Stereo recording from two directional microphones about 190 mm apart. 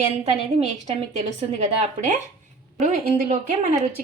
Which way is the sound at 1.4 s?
35° right (ahead or behind).